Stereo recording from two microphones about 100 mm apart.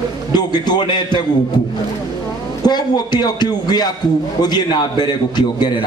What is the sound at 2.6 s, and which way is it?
A man's voice, 45° left (ahead or behind).